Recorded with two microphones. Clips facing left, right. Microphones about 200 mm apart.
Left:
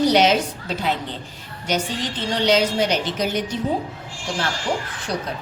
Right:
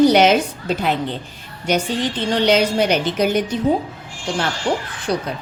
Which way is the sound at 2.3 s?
60° right (ahead or behind).